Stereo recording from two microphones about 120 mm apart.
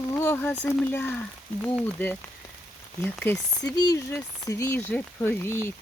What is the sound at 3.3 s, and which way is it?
Speech, 30° left (ahead or behind).